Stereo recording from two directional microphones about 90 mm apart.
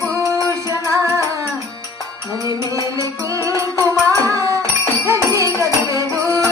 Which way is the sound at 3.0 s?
35° right (ahead or behind).